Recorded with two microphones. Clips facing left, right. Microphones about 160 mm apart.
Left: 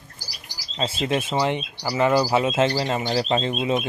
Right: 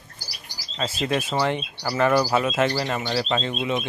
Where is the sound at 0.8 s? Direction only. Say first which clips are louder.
Left 1 dB; 25° left (ahead or behind).